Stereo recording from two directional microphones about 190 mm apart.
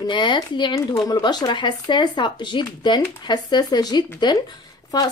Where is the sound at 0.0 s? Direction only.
25° left (ahead or behind).